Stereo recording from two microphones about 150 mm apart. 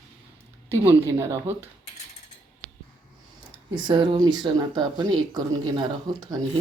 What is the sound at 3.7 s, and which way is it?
Speech, 30° right (ahead or behind).